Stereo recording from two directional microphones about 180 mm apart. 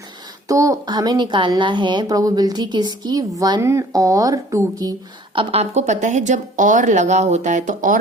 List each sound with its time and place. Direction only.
0.4 s a woman's voice: 20° right (ahead or behind); by 7.9 s 45° right (ahead or behind)